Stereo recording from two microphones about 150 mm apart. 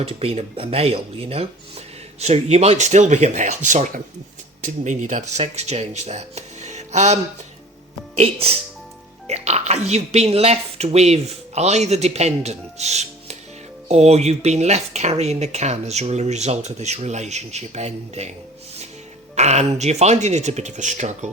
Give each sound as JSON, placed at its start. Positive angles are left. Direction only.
{"t": 0.0, "sound": "speech", "side_deg": -40}
{"t": 8.2, "sound": "speech", "side_deg": -40}
{"t": 19.4, "sound": "speech", "side_deg": -50}